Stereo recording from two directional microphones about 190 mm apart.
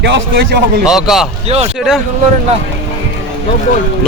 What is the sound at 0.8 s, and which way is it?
Speech, centre (ahead or behind).